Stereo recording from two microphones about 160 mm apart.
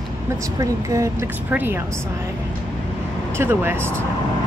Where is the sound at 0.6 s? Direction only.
20° right (ahead or behind).